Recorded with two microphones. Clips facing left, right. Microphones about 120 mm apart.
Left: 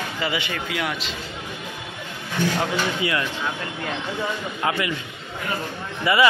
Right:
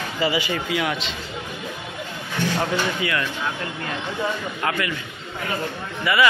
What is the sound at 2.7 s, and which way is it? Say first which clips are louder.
Speech: even; 20° left (ahead or behind).